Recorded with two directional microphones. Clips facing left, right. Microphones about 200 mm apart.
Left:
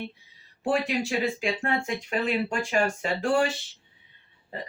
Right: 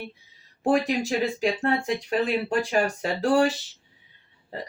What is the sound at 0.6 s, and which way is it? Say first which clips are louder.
Speech: right 3 dB; 40° right (ahead or behind).